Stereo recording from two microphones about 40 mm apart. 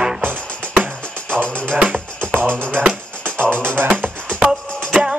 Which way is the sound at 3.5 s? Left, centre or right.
Right.